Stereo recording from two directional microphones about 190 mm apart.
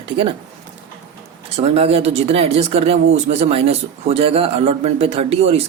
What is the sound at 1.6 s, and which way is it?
Speech, 30° right (ahead or behind).